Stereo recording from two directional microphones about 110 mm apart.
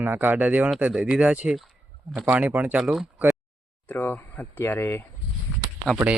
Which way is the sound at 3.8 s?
20° left (ahead or behind).